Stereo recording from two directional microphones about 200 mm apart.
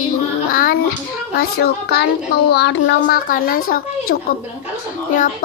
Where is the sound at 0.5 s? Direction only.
45° left (ahead or behind).